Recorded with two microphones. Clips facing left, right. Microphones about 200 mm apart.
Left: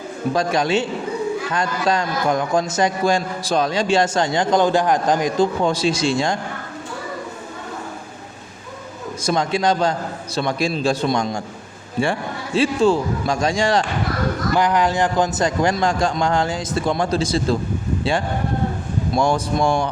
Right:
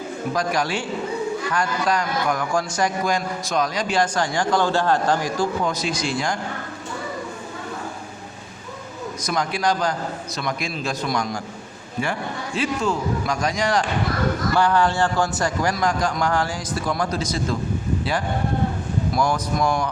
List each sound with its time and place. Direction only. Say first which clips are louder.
0.3 s a man's voice: left 5 dB; 25° left (ahead or behind)
9.2 s a man's voice: left 4 dB; 25° left (ahead or behind)
14.5 s a man's voice: left 2 dB; 15° left (ahead or behind)
19.1 s a man's voice: left 4 dB; 25° left (ahead or behind)